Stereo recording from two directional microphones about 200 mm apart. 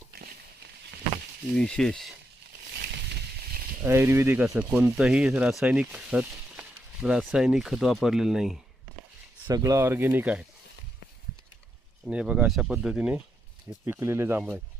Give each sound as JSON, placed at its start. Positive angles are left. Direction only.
{"t": 0.1, "sound": "a sound", "side_deg": -55}
{"t": 1.5, "sound": "speech", "side_deg": 5}
{"t": 2.7, "sound": "a sound", "side_deg": -55}
{"t": 3.8, "sound": "speech", "side_deg": -10}
{"t": 9.5, "sound": "speech", "side_deg": -20}
{"t": 12.0, "sound": "speech", "side_deg": -5}